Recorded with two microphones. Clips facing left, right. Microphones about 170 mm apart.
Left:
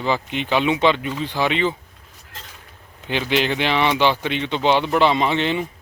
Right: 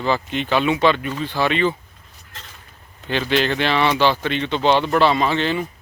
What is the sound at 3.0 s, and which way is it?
Speech, 15° left (ahead or behind).